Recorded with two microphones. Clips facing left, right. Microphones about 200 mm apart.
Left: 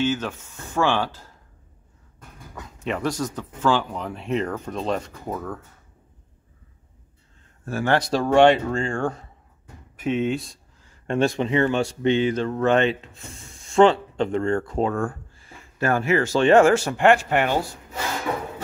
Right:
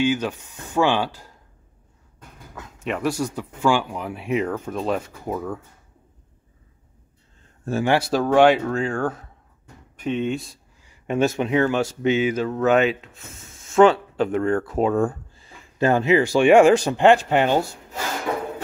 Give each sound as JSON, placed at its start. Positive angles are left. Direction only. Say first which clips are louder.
{"t": 0.0, "sound": "speech", "louder": "right 2 dB", "side_deg": -15}
{"t": 2.5, "sound": "speech", "louder": "even", "side_deg": 0}
{"t": 7.6, "sound": "speech", "louder": "right 3 dB", "side_deg": -25}
{"t": 7.9, "sound": "speech", "louder": "even", "side_deg": -5}
{"t": 10.8, "sound": "a sound", "louder": "right 1 dB", "side_deg": -10}
{"t": 11.1, "sound": "speech", "louder": "right 1 dB", "side_deg": -5}
{"t": 14.9, "sound": "speech", "louder": "right 5 dB", "side_deg": -20}